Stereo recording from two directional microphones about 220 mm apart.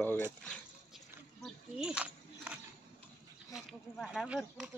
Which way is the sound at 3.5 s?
Centre (ahead or behind).